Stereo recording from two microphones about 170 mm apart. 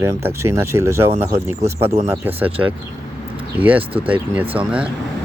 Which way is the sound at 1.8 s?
35° right (ahead or behind).